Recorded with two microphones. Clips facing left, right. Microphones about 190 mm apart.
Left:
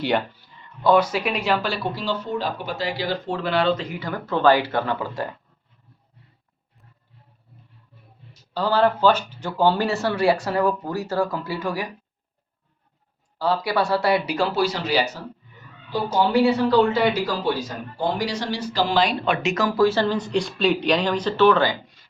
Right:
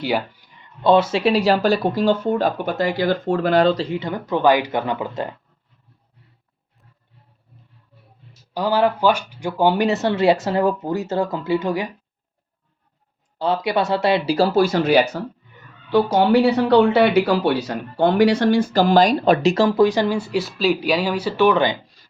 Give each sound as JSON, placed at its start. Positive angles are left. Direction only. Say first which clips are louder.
{"t": 0.3, "sound": "speech", "louder": "even", "side_deg": -20}
{"t": 8.5, "sound": "speech", "louder": "right 1 dB", "side_deg": -15}
{"t": 13.4, "sound": "speech", "louder": "right 2 dB", "side_deg": -20}
{"t": 14.3, "sound": "speech", "louder": "right 6 dB", "side_deg": -40}
{"t": 15.9, "sound": "speech", "louder": "right 6 dB", "side_deg": -70}